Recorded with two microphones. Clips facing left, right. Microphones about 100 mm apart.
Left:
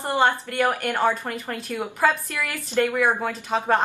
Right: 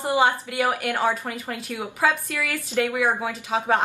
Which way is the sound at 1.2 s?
15° right (ahead or behind).